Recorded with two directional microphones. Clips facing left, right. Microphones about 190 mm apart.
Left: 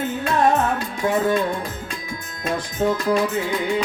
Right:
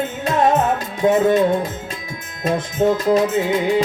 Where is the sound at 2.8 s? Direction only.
25° right (ahead or behind).